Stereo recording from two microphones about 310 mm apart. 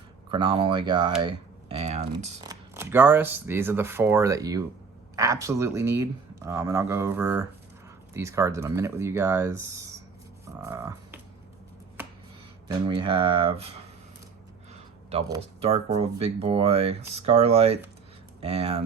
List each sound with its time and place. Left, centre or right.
0.3 s speech: centre
10.6 s frog: centre
12.6 s speech: centre
15.1 s speech: centre